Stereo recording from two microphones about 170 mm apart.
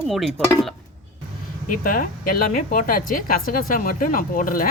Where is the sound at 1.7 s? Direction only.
55° left (ahead or behind).